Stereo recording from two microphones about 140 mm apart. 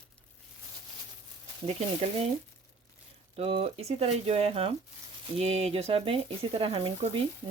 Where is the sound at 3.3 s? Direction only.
45° right (ahead or behind).